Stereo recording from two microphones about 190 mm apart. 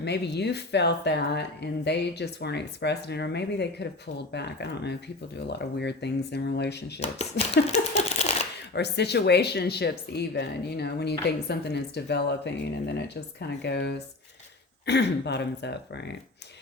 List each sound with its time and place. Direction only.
0.0 s speech: 65° left (ahead or behind)
7.0 s speech: 30° left (ahead or behind)
7.7 s a sound: 35° left (ahead or behind)
8.7 s speech: 60° left (ahead or behind)